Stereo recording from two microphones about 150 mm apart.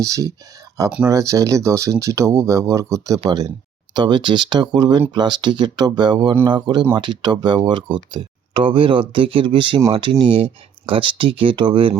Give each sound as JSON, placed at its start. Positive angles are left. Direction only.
{"t": 0.0, "sound": "speech", "side_deg": -20}